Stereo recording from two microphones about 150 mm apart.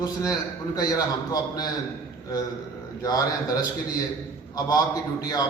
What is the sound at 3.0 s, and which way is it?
Speech, 20° left (ahead or behind).